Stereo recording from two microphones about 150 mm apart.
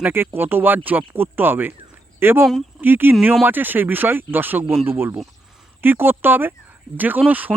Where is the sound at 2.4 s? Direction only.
5° right (ahead or behind).